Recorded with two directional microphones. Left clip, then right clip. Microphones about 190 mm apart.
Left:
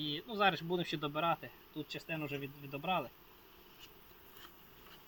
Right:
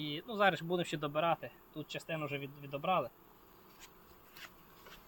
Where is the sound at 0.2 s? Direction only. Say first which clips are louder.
Right 2 dB; 25° right (ahead or behind).